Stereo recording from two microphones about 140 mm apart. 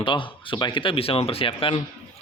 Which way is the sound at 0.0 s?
35° left (ahead or behind).